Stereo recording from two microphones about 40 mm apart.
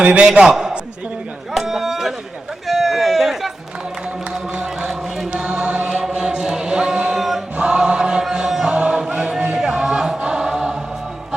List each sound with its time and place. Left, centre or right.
0.0 s a man's voice: right
1.5 s a sound: centre
4.5 s a sound: right
4.9 s chant: centre
5.3 s chant: right
6.9 s chant: right
7.2 s choir: centre
7.5 s choir: right
8.3 s music: centre
8.7 s choir: centre
9.0 s a sound: right
9.6 s music: centre
10.2 s chant: centre